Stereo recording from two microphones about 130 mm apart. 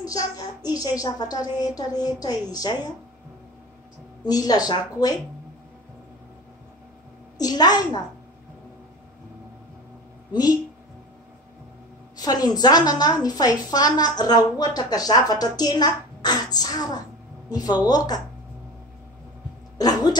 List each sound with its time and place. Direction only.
0.0 s a child's voice: 25° left (ahead or behind)
4.2 s a woman's voice: 30° left (ahead or behind)
7.3 s a woman's voice: 30° left (ahead or behind)
12.2 s a woman's voice: 30° left (ahead or behind)
19.8 s a woman's voice: 30° left (ahead or behind)